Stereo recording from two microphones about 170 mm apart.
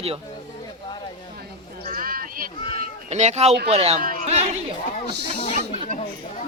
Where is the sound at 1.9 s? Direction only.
60° right (ahead or behind).